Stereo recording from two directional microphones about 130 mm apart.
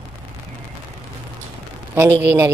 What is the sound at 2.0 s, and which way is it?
Speech, 20° right (ahead or behind).